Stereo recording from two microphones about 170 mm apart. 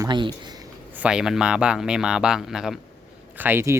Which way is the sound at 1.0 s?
5° right (ahead or behind).